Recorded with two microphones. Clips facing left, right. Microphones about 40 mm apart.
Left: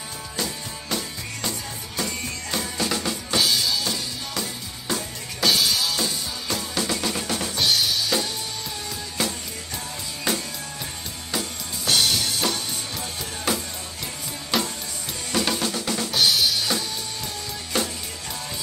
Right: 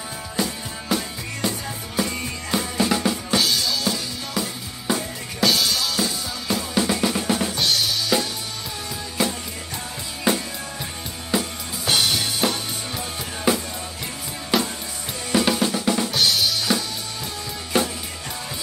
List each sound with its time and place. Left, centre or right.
0.4 s music: centre
2.5 s drum: centre
3.3 s drum kit: centre
7.5 s drum kit: centre
9.2 s music: centre
10.3 s drum: right
11.3 s music: centre
14.5 s drum kit: centre
16.1 s drum kit: centre
17.7 s drum kit: centre